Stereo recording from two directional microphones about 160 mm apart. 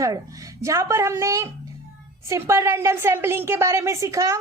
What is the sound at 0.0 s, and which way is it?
A woman's voice, 20° right (ahead or behind).